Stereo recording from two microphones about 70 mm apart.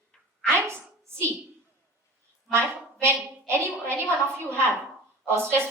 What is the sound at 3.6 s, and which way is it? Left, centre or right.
Speech, centre.